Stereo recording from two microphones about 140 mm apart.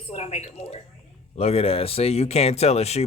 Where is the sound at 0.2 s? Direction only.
50° left (ahead or behind).